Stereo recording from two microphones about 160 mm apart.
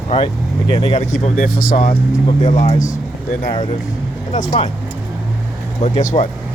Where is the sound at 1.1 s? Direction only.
55° left (ahead or behind).